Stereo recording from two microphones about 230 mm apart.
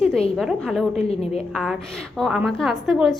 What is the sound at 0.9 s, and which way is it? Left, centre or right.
Speech, left.